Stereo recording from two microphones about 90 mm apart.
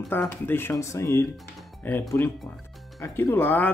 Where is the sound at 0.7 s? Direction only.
35° left (ahead or behind).